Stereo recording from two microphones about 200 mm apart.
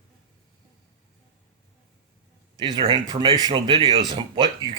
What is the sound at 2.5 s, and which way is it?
Speech, 25° right (ahead or behind).